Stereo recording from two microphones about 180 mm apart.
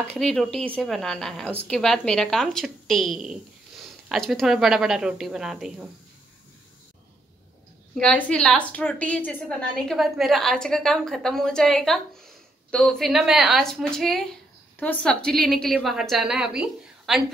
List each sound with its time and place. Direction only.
0.0 s a woman's voice: 5° left (ahead or behind)
7.9 s a woman's voice: 5° left (ahead or behind)